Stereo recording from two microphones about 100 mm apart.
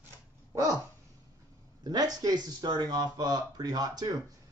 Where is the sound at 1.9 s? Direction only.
40° right (ahead or behind).